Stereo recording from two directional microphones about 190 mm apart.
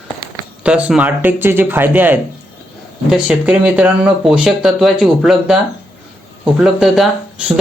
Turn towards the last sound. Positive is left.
turn(degrees=-5)  # may be behind; listen again after turning